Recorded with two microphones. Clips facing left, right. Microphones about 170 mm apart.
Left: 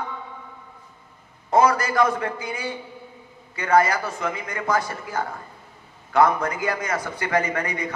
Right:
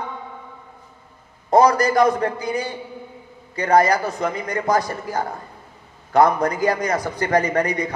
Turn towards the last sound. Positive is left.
turn(degrees=-35)  # may be behind; listen again after turning